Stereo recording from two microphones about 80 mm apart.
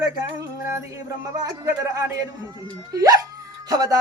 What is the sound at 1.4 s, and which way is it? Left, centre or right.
Speech, right.